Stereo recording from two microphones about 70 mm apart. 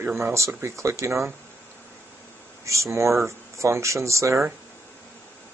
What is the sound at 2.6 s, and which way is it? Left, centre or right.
Speech, right.